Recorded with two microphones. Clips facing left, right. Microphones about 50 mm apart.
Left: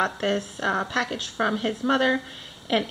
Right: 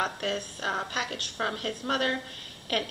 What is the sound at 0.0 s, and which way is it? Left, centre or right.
Speech, centre.